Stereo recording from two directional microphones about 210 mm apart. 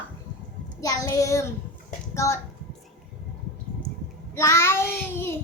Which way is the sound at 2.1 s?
15° left (ahead or behind).